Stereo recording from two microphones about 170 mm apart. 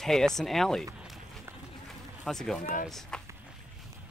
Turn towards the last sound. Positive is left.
turn(degrees=5)  # may be behind; listen again after turning